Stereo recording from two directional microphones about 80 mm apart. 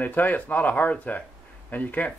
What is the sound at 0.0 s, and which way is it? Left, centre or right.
Speech, left.